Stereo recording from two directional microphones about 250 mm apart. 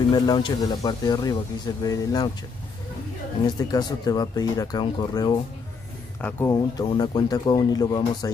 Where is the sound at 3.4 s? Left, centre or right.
Centre.